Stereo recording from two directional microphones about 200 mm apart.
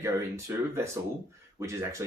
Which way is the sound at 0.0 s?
15° right (ahead or behind).